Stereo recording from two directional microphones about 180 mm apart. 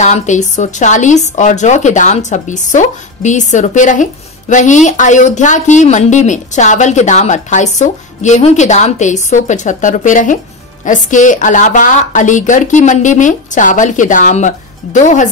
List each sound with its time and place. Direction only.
0.0 s a woman's voice: 40° left (ahead or behind)